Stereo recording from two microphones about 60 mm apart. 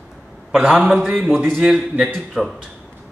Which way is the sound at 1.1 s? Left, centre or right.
Centre.